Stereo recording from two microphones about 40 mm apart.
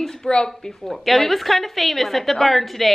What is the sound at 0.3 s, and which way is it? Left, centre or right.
Speech, left.